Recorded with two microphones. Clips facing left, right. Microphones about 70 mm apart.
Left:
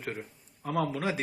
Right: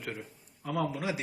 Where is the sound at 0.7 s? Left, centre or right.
Left.